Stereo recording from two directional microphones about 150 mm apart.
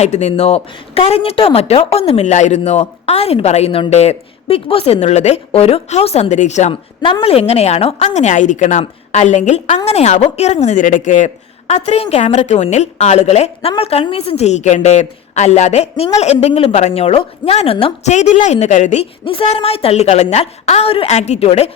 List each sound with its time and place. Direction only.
0.0 s speech: 50° left (ahead or behind)
7.0 s speech: 35° left (ahead or behind); by 11.3 s 55° left (ahead or behind)
11.7 s speech: 45° left (ahead or behind)
19.2 s speech: 40° left (ahead or behind)